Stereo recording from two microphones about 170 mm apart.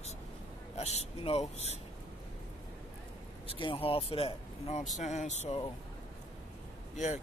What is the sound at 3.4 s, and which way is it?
Speech, 30° left (ahead or behind).